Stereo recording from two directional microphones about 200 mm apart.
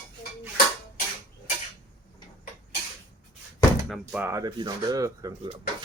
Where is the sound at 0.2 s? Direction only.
45° left (ahead or behind).